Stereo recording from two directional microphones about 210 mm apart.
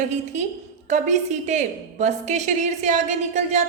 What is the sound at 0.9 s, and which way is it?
A woman's voice, 35° right (ahead or behind).